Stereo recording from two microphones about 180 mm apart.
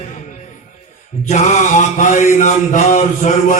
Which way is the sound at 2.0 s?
45° left (ahead or behind).